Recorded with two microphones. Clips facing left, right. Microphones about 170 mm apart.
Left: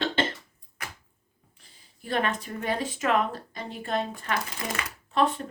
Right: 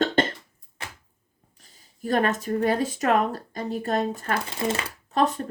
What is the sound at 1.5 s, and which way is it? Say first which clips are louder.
Speech: right 2 dB; 45° right (ahead or behind).